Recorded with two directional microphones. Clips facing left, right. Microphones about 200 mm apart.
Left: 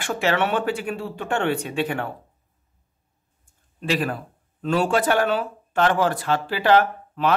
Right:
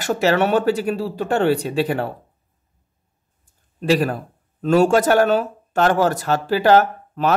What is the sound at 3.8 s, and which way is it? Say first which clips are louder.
Speech: right 6 dB; 40° right (ahead or behind).